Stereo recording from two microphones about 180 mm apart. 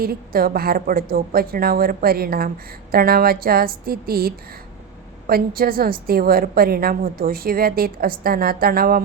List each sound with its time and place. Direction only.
0.0 s a woman's voice: 55° right (ahead or behind)